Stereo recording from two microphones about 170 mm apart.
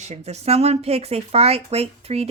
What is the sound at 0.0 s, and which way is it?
Speech, 40° right (ahead or behind).